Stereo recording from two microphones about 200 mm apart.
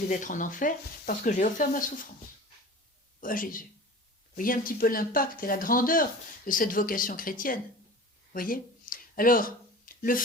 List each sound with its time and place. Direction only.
0.1 s speech: 40° left (ahead or behind)
3.2 s a man's voice: 45° left (ahead or behind)
8.3 s a sound: 45° left (ahead or behind)